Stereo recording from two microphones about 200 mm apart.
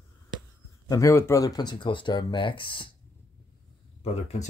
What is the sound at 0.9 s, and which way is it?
Speech, 15° left (ahead or behind).